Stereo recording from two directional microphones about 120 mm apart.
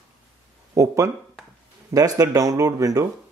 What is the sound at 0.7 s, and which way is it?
Speech, 25° right (ahead or behind).